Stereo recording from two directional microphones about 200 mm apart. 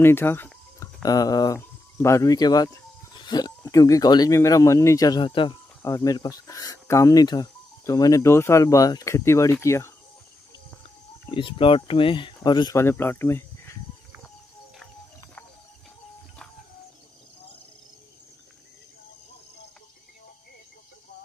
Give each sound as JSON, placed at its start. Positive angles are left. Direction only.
{"t": 0.0, "sound": "speech", "side_deg": 10}
{"t": 11.3, "sound": "speech", "side_deg": 25}